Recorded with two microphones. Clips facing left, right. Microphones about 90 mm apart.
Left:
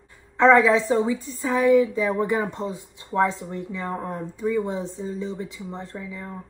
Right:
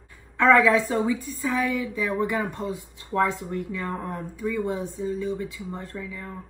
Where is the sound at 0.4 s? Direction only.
20° left (ahead or behind).